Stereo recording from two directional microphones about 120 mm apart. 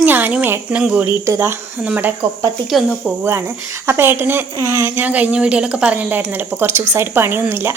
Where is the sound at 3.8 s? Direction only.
20° right (ahead or behind).